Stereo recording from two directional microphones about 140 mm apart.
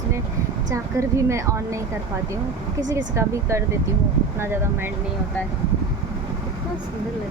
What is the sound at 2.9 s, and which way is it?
A woman's voice, 20° right (ahead or behind).